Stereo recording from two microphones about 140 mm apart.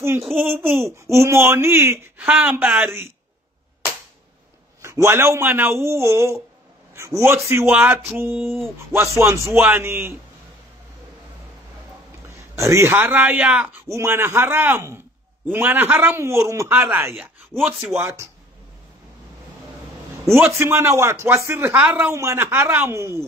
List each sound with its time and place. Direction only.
0.0 s a man's voice: 20° right (ahead or behind)
4.8 s a man's voice: 20° right (ahead or behind)
12.3 s speech: 20° right (ahead or behind)
20.2 s speech: 15° right (ahead or behind)